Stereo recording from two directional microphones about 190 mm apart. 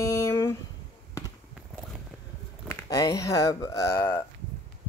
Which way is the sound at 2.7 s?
15° left (ahead or behind).